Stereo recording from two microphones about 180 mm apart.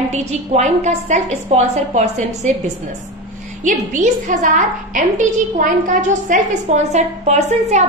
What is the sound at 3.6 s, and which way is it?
A woman's voice, 45° right (ahead or behind).